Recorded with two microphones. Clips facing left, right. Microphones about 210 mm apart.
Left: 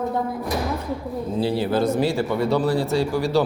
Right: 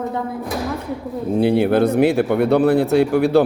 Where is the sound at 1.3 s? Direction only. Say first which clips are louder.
Right 7 dB; 60° right (ahead or behind).